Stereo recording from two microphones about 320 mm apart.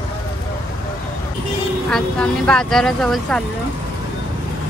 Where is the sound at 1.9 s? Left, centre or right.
Centre.